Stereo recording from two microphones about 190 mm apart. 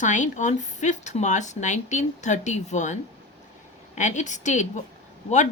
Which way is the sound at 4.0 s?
40° left (ahead or behind).